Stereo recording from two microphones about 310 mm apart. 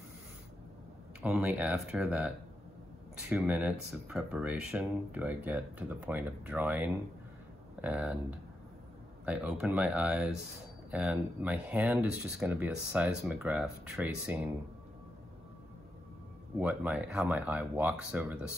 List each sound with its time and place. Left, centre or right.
1.2 s speech: centre
16.5 s speech: centre